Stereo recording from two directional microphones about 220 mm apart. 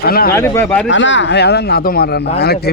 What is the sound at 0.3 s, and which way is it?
Speech, 10° left (ahead or behind).